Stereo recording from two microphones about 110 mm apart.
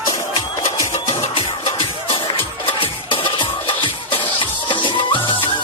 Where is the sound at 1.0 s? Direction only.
60° left (ahead or behind).